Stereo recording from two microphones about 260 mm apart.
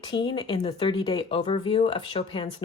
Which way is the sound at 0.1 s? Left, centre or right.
Centre.